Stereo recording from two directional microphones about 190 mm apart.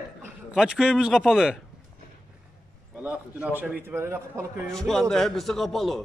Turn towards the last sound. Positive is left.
turn(degrees=0)  # may be behind; listen again after turning